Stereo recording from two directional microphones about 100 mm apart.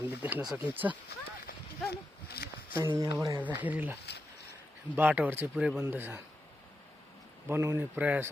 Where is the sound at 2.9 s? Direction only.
35° right (ahead or behind).